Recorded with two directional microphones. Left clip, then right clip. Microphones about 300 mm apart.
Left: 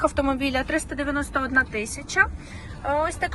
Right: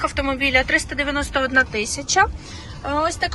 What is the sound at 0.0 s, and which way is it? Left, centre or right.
Speech, centre.